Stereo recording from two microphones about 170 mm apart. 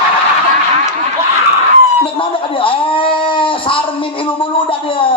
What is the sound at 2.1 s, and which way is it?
A man's voice, 30° left (ahead or behind).